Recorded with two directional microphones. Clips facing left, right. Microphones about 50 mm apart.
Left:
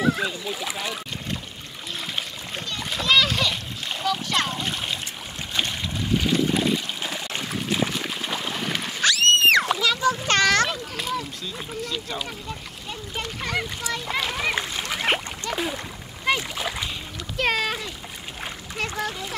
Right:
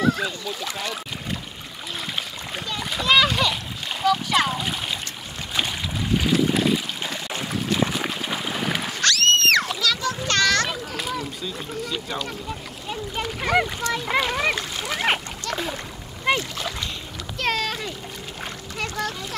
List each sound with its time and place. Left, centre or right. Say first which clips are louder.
0.0 s speech: right 1 dB; centre
2.0 s splash: right 1 dB; centre
5.5 s a sound: right 1 dB; centre
9.0 s splash: left 1 dB; centre
10.2 s a sound: right 1 dB; left
10.7 s a sound: even; centre
12.8 s a child's voice: right 4 dB; centre
14.5 s a child's voice: even; centre
16.3 s splash: even; centre
18.9 s a child's voice: right 1 dB; centre